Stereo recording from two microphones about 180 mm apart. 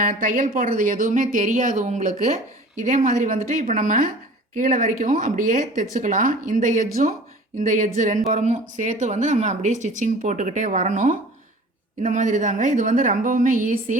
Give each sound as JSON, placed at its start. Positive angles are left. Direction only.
{"t": 0.0, "sound": "speech", "side_deg": -50}